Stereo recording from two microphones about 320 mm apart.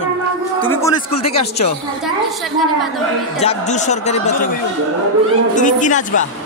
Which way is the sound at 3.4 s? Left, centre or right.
Left.